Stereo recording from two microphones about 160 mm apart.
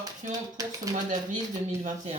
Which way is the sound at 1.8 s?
50° right (ahead or behind).